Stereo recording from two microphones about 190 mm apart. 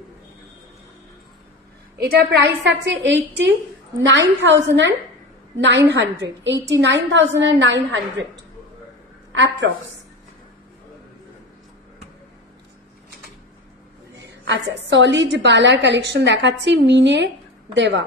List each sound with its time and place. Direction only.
2.0 s a woman's voice: 55° right (ahead or behind); by 8.3 s 75° right (ahead or behind)
9.3 s a woman's voice: 80° right
14.4 s a woman's voice: 70° right (ahead or behind)